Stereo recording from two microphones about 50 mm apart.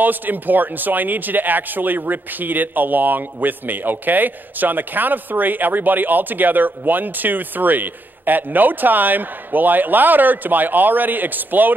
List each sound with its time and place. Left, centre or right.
0.0 s speech: right